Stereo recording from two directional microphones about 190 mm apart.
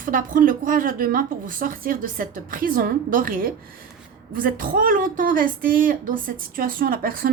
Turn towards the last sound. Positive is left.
turn(degrees=-50)  # may be behind; listen again after turning